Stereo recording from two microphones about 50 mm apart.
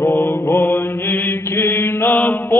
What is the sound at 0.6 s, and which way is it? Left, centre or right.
Mantra, left.